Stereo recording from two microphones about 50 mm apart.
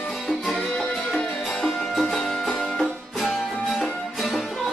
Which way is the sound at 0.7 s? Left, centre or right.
Centre.